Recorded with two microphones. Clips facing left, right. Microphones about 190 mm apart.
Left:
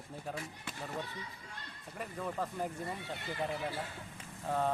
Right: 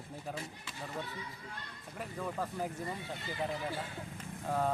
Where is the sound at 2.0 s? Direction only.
Centre (ahead or behind).